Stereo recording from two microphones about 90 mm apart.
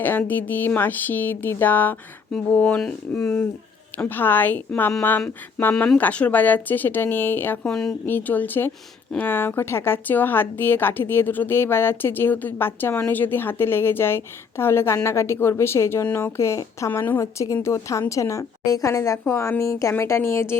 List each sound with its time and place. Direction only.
0.0 s speech: 20° left (ahead or behind)
3.2 s speech: 25° left (ahead or behind)
7.7 s speech: 5° left (ahead or behind)
8.0 s speech: 20° left (ahead or behind)
17.2 s speech: 35° left (ahead or behind)